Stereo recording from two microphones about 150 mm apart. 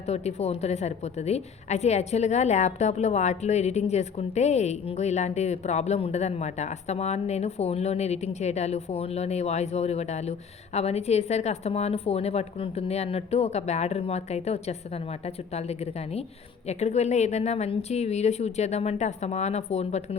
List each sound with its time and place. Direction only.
0.1 s a woman's voice: 45° left (ahead or behind)